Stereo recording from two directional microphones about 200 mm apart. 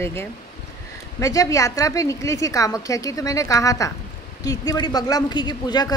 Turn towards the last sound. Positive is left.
turn(degrees=20)  # may be behind; listen again after turning